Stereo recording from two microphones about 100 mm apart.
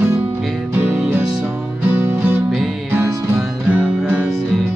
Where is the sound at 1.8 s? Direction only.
20° right (ahead or behind).